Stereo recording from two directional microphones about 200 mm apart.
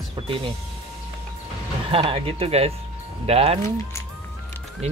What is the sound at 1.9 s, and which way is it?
Speech, 25° right (ahead or behind).